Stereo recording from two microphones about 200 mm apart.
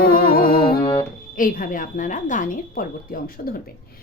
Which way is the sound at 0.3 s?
45° left (ahead or behind).